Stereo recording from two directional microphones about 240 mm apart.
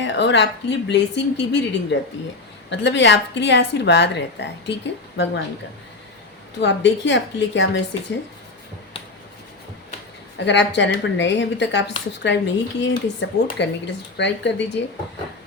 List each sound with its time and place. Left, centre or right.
0.0 s a woman's voice: left
6.6 s a woman's voice: left
10.4 s a woman's voice: left